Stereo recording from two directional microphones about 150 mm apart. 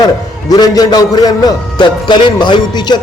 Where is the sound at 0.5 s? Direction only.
25° left (ahead or behind).